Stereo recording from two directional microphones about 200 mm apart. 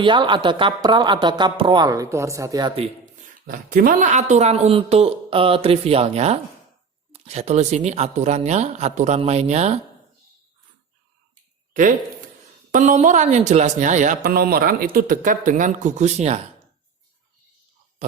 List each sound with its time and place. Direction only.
0.0 s speech: 25° right (ahead or behind)
3.2 s speech: 45° right (ahead or behind)
11.7 s speech: 40° right (ahead or behind)